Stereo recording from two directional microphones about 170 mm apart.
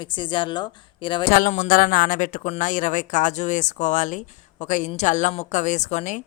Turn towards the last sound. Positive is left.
turn(degrees=45)  # may be behind; listen again after turning